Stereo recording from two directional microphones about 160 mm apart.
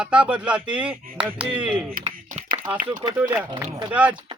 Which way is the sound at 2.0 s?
40° right (ahead or behind).